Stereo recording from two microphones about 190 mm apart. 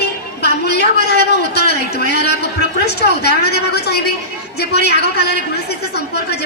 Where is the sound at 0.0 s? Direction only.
60° left (ahead or behind).